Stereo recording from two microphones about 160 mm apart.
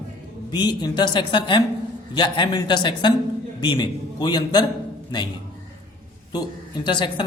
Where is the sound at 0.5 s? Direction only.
25° left (ahead or behind).